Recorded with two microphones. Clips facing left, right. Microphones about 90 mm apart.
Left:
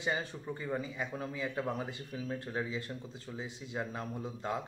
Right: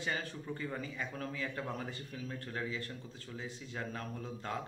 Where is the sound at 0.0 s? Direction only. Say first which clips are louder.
Left 3 dB; 20° left (ahead or behind).